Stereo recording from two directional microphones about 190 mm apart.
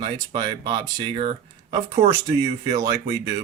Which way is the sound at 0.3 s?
25° right (ahead or behind).